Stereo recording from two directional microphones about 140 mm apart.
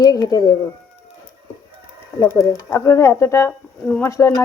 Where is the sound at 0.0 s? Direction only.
30° left (ahead or behind).